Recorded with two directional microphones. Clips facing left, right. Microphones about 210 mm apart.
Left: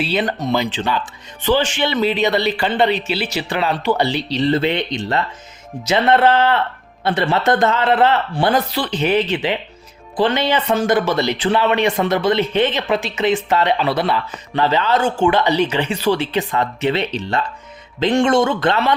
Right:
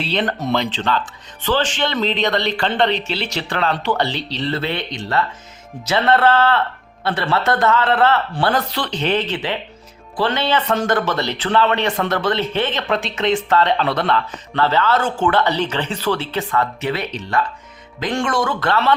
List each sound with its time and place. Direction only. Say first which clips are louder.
0.0 s speech: left 2 dB; 5° left (ahead or behind)